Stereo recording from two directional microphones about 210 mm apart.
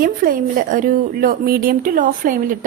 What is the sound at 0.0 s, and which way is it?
Speech, 40° right (ahead or behind).